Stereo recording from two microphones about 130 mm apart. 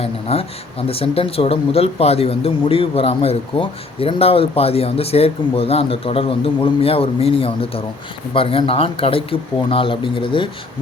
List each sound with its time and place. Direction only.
0.0 s speech: 50° left (ahead or behind)